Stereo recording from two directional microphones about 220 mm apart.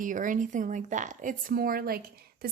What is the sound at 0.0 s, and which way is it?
A woman's voice, 35° right (ahead or behind).